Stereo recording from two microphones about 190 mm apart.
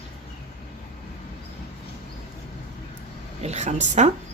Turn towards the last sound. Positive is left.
turn(degrees=-35)  # may be behind; listen again after turning